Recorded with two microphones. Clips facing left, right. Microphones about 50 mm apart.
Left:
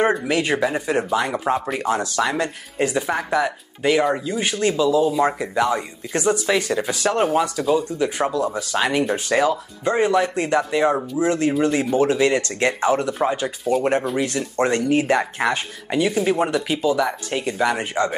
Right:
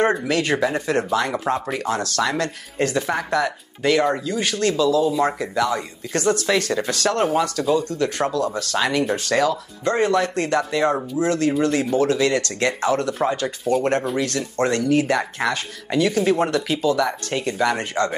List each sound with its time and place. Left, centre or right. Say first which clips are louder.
0.0 s speech: even; centre
1.8 s speech: left 1 dB; centre